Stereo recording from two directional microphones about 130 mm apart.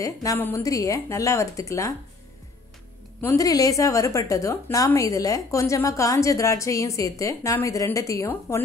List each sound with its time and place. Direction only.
0.0 s a woman's voice: 25° left (ahead or behind)
3.2 s a woman's voice: 20° left (ahead or behind)